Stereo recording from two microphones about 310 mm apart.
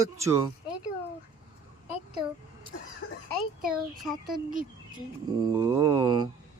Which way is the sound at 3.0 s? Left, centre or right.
Left.